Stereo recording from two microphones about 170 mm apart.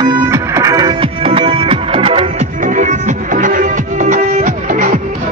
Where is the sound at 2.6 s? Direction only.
45° right (ahead or behind).